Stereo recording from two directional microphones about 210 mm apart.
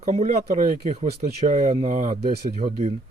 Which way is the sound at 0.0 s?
35° right (ahead or behind).